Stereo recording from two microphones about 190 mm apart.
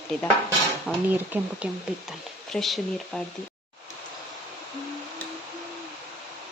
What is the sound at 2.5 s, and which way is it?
Speech, centre (ahead or behind).